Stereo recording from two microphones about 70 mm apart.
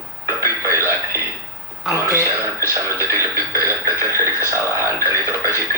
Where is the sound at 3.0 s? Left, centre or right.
Right.